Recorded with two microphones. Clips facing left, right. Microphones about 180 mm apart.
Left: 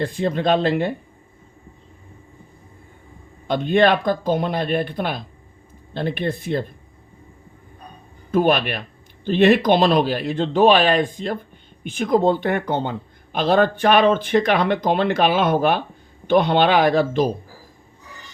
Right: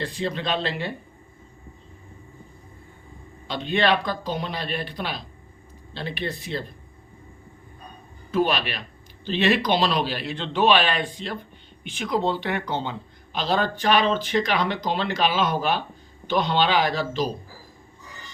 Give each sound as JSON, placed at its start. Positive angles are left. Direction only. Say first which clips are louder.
{"t": 0.0, "sound": "speech", "louder": "left 7 dB", "side_deg": 50}
{"t": 3.4, "sound": "speech", "louder": "left 7 dB", "side_deg": 50}
{"t": 8.3, "sound": "speech", "louder": "left 5 dB", "side_deg": 50}